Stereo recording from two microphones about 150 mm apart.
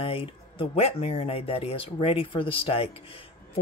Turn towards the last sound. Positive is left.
turn(degrees=40)  # may be behind; listen again after turning